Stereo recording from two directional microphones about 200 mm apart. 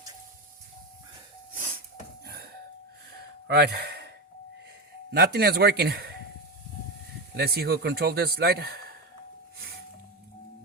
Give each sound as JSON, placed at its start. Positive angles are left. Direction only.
{"t": 2.2, "sound": "doorbell", "side_deg": -50}
{"t": 3.4, "sound": "speech", "side_deg": -55}
{"t": 5.1, "sound": "speech", "side_deg": -50}
{"t": 7.3, "sound": "speech", "side_deg": -50}